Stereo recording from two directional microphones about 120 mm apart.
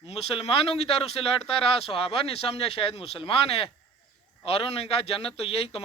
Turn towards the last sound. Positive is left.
turn(degrees=55)  # may be behind; listen again after turning